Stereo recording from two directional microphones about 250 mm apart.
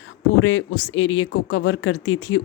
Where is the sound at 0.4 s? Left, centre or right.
Left.